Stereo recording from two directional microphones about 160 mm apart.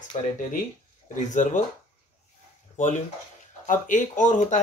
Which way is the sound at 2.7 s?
50° left (ahead or behind).